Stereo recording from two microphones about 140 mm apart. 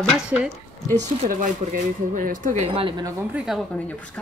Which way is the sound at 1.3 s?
65° right (ahead or behind).